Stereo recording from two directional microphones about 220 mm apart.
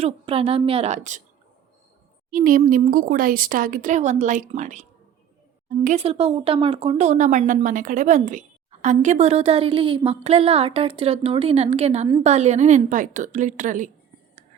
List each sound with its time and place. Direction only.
0.0 s speech: 25° right (ahead or behind)
2.3 s speech: 35° right (ahead or behind)